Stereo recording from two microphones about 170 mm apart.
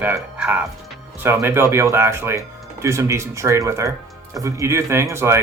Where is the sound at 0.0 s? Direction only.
10° right (ahead or behind).